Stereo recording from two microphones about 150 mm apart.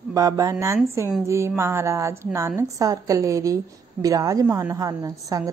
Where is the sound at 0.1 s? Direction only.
20° right (ahead or behind).